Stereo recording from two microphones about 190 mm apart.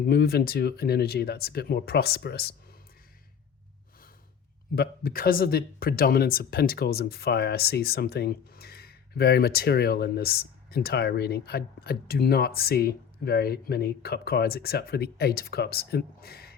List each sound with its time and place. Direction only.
0.0 s speech: 60° left (ahead or behind)
4.7 s speech: 55° left (ahead or behind)